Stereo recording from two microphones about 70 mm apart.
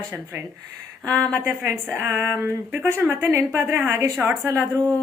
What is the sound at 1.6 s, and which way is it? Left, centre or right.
Speech, right.